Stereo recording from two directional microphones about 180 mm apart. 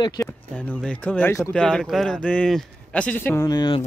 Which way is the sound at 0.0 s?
20° left (ahead or behind).